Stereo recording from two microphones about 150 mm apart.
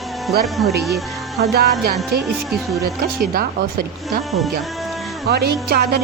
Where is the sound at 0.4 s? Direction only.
Centre (ahead or behind).